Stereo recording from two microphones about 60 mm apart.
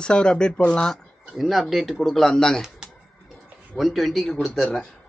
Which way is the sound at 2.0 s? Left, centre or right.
Centre.